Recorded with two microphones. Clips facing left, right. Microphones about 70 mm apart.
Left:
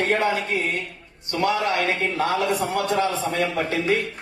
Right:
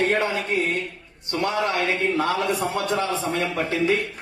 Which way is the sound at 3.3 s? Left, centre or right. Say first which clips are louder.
Even; left.